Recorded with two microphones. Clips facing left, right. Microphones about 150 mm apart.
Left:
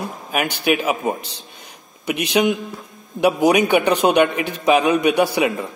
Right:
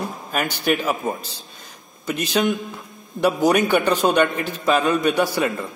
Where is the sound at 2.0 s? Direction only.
70° left (ahead or behind).